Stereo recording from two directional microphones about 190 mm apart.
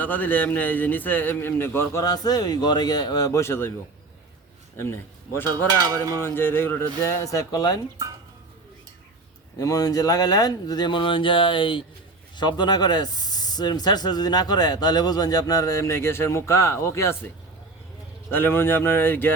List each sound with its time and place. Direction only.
0.0 s a man's voice: 10° left (ahead or behind)
4.8 s a man's voice: 10° left (ahead or behind)
5.8 s cowbell: 20° right (ahead or behind)
6.2 s a man's voice: 10° left (ahead or behind)
9.6 s a man's voice: 20° left (ahead or behind)